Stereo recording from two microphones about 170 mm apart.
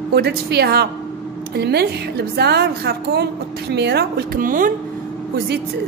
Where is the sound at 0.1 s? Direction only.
70° right (ahead or behind); by 4.7 s 55° right (ahead or behind).